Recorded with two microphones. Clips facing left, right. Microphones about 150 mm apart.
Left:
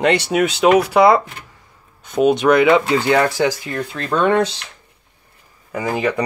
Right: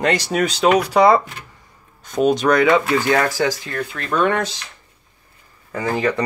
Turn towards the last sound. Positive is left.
turn(degrees=10)  # may be behind; listen again after turning